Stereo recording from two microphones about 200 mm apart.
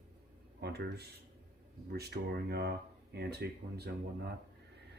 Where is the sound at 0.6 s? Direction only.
55° right (ahead or behind).